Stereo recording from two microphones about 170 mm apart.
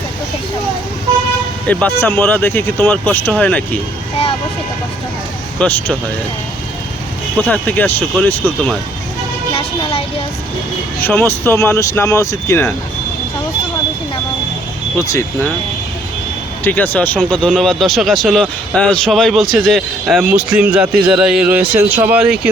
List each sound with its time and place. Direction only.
1.6 s speech: 10° left (ahead or behind)
5.5 s speech: 5° left (ahead or behind)
7.3 s speech: 10° left (ahead or behind)
9.5 s vehicle: 35° left (ahead or behind)
11.0 s speech: 10° left (ahead or behind)
14.9 s speech: 15° left (ahead or behind)
16.6 s speech: 10° left (ahead or behind); by 22.4 s 5° right (ahead or behind)